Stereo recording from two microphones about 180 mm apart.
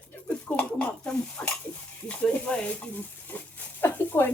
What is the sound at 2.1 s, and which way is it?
Speech, 5° left (ahead or behind).